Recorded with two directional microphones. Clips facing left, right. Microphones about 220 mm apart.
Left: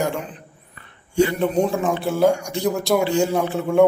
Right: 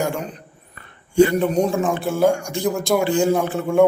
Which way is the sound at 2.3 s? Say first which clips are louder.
Even; 50° right (ahead or behind).